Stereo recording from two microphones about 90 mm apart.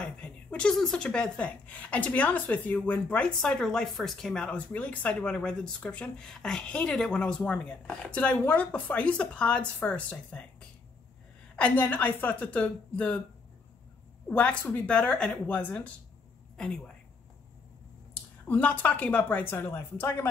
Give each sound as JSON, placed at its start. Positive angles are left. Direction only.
{"t": 0.0, "sound": "speech", "side_deg": 10}
{"t": 11.5, "sound": "speech", "side_deg": 20}
{"t": 14.3, "sound": "speech", "side_deg": 15}
{"t": 16.5, "sound": "speech", "side_deg": 5}
{"t": 18.5, "sound": "speech", "side_deg": 20}